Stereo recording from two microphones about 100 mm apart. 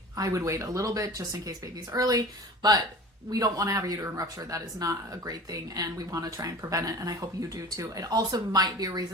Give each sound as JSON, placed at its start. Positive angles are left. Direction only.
{"t": 0.2, "sound": "speech", "side_deg": -30}